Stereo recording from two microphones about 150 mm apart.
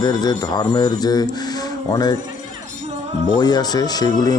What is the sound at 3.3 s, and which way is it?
Speech, 25° left (ahead or behind).